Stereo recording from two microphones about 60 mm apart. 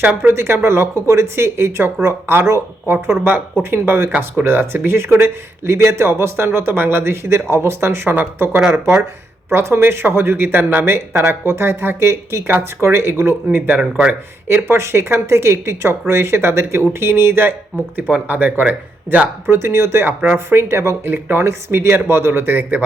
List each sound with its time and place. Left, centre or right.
0.3 s speech: right
13.7 s speech: right
14.4 s speech: right
19.5 s speech: right